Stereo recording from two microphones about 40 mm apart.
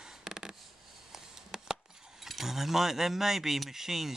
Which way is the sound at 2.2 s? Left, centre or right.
Centre.